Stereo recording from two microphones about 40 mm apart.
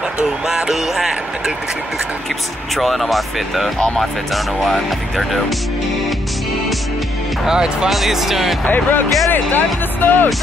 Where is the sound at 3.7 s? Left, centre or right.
Centre.